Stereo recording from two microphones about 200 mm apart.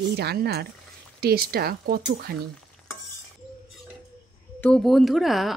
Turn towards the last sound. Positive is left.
turn(degrees=0)  # may be behind; listen again after turning